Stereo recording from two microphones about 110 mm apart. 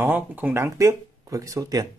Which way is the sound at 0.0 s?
15° right (ahead or behind).